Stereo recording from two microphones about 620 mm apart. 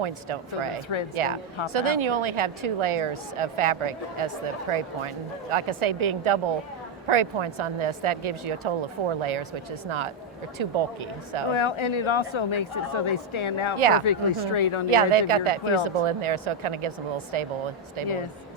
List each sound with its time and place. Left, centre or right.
0.0 s a woman's voice: right
11.5 s speech: left
13.7 s a woman's voice: right
14.0 s speech: left
14.8 s a woman's voice: right